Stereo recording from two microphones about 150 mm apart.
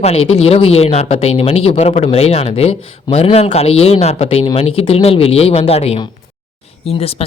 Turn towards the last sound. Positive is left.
turn(degrees=40)  # may be behind; listen again after turning